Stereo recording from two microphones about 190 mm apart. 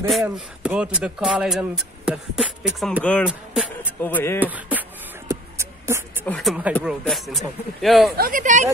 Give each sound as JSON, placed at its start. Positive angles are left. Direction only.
{"t": 0.1, "sound": "speech", "side_deg": -5}
{"t": 4.4, "sound": "beatboxing", "side_deg": -10}
{"t": 6.2, "sound": "speech", "side_deg": 5}
{"t": 8.2, "sound": "speech", "side_deg": -45}